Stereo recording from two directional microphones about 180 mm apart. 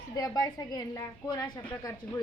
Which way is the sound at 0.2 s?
20° left (ahead or behind).